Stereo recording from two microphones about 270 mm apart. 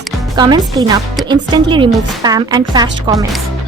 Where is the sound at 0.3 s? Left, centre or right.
Centre.